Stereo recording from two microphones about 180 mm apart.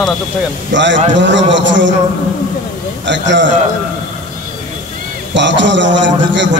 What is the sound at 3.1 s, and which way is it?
Speech, 85° right.